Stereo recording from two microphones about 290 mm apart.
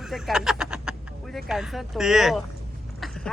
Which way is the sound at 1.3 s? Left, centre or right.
Centre.